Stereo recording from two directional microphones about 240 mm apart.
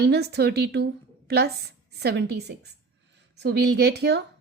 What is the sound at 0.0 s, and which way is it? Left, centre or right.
Speech, right.